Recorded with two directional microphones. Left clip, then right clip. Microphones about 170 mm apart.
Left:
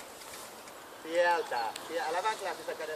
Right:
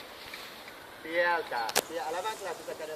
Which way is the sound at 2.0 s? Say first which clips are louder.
Left 2 dB; 30° left (ahead or behind).